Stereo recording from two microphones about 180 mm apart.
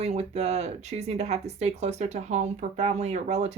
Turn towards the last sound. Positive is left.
turn(degrees=-40)  # may be behind; listen again after turning